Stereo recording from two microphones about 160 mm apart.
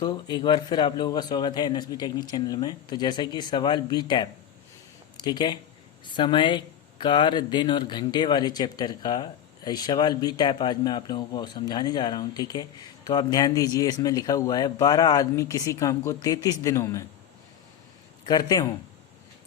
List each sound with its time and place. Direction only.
0.0 s speech: 25° left (ahead or behind)
18.3 s speech: 25° left (ahead or behind)